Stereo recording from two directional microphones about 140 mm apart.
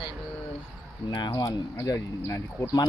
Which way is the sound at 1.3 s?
25° left (ahead or behind).